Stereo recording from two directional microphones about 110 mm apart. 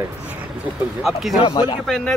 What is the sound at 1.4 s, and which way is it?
Speech, 45° left (ahead or behind).